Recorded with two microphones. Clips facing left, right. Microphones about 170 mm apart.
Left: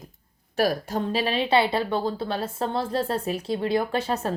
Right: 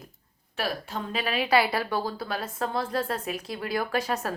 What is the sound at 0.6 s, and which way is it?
A woman's voice, 40° left (ahead or behind).